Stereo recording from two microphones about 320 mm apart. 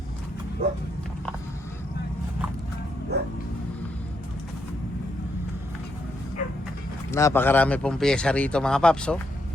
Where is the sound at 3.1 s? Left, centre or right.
Right.